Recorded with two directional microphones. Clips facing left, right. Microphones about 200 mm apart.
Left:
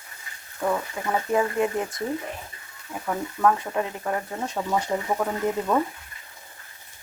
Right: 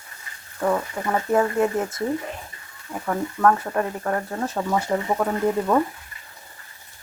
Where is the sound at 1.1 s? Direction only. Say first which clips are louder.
Right 3 dB; 15° left (ahead or behind).